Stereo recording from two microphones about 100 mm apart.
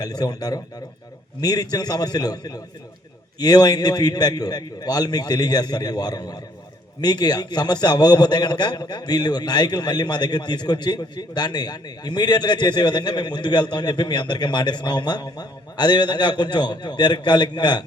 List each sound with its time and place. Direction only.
0.0 s a man's voice: 40° left (ahead or behind)